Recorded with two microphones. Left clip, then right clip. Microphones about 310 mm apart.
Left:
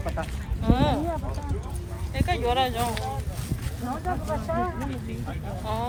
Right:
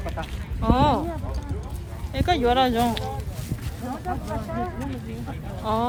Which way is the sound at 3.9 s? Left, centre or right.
Centre.